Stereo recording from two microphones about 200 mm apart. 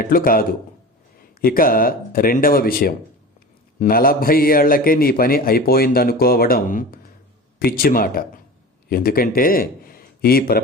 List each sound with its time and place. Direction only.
0.0 s a man's voice: 45° left (ahead or behind)